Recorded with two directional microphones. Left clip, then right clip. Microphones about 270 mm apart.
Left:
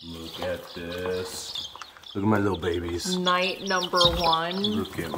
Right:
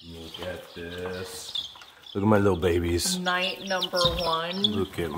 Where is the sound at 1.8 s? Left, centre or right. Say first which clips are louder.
Right 1 dB; right.